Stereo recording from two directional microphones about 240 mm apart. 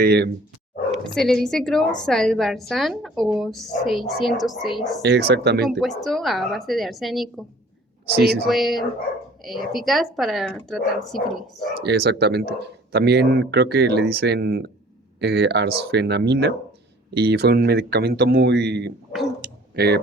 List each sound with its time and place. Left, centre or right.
0.0 s speech: right
1.0 s a woman's voice: centre
5.0 s speech: right
5.6 s a woman's voice: centre
8.1 s speech: right
8.4 s a woman's voice: centre
11.8 s speech: right